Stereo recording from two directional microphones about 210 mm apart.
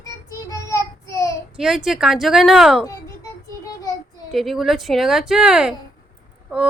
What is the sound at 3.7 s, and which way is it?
Child singing, 15° left (ahead or behind).